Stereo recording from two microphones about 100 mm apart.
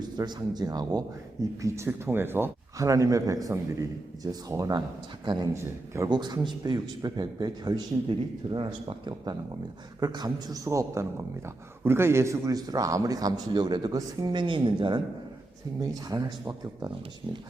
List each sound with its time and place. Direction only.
0.0 s a man's voice: 45° right (ahead or behind); by 2.5 s 20° right (ahead or behind)
2.7 s a man's voice: 35° right (ahead or behind)
5.5 s a man's voice: 30° right (ahead or behind)
6.1 s a man's voice: 45° right (ahead or behind)
15.8 s a man's voice: 35° right (ahead or behind)
17.2 s a man's voice: 50° right (ahead or behind)